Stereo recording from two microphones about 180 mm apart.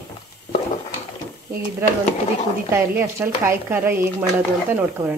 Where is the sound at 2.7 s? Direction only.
15° right (ahead or behind).